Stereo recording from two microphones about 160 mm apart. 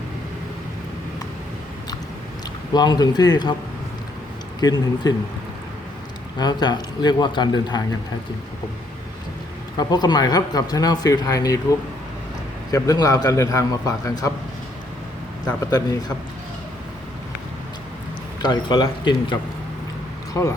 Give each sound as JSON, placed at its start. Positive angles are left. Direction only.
{"t": 2.7, "sound": "speech", "side_deg": 25}
{"t": 4.6, "sound": "speech", "side_deg": 25}
{"t": 6.4, "sound": "speech", "side_deg": 25}
{"t": 9.7, "sound": "speech", "side_deg": 25}
{"t": 12.7, "sound": "speech", "side_deg": 20}
{"t": 15.6, "sound": "speech", "side_deg": 20}
{"t": 18.4, "sound": "speech", "side_deg": 30}